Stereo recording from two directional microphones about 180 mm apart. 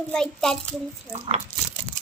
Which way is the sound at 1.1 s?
35° right (ahead or behind).